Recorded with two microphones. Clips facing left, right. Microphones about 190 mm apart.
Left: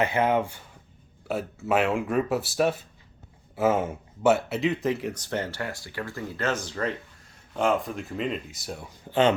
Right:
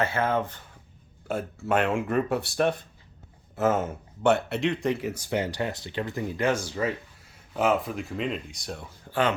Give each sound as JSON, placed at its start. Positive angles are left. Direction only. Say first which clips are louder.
{"t": 0.0, "sound": "speech", "louder": "left 2 dB", "side_deg": 15}
{"t": 1.3, "sound": "speech", "louder": "left 1 dB", "side_deg": 0}
{"t": 9.0, "sound": "speech", "louder": "left 4 dB", "side_deg": 25}